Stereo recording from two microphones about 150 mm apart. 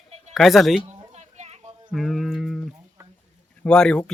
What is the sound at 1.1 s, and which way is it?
Music, 45° right (ahead or behind).